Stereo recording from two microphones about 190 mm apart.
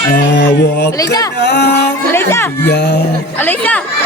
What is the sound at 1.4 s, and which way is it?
Music, 60° left (ahead or behind).